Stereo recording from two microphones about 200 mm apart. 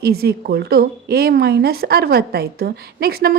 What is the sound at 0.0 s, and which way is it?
A woman's voice, 50° right (ahead or behind).